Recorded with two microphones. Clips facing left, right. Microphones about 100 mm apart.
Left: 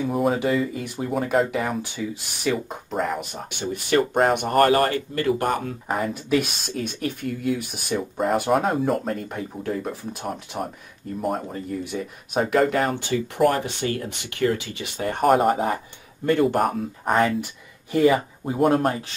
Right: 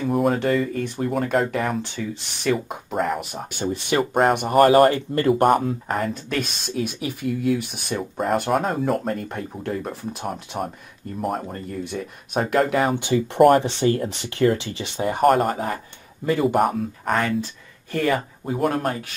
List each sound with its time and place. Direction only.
0.0 s speech: centre (ahead or behind)
4.6 s speech: 25° right (ahead or behind)
5.9 s speech: 5° left (ahead or behind)
13.0 s speech: 25° right (ahead or behind)
15.0 s speech: centre (ahead or behind)
15.5 s speech: 25° left (ahead or behind)
16.3 s speech: centre (ahead or behind)
17.1 s speech: 20° left (ahead or behind)
18.7 s speech: 25° left (ahead or behind)